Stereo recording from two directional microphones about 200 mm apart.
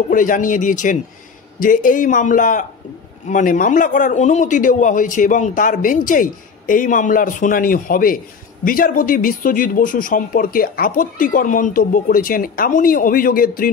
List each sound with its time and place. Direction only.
0.1 s a man's voice: 40° left (ahead or behind)